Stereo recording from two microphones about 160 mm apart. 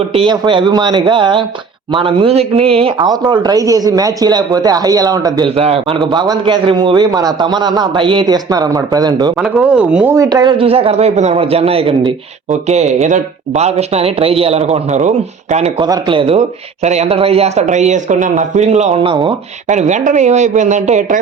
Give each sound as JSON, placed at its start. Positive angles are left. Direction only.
{"t": 0.1, "sound": "a man's voice", "side_deg": -35}
{"t": 5.5, "sound": "a man's voice", "side_deg": -35}
{"t": 9.4, "sound": "speech", "side_deg": -5}
{"t": 10.2, "sound": "a man's voice", "side_deg": -25}
{"t": 15.8, "sound": "a man's voice", "side_deg": -30}
{"t": 19.0, "sound": "a man's voice", "side_deg": -30}
{"t": 19.6, "sound": "speech", "side_deg": -50}